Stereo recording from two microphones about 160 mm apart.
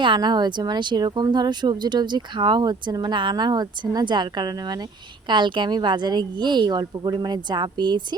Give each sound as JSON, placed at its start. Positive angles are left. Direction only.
{"t": 0.0, "sound": "speech", "side_deg": -30}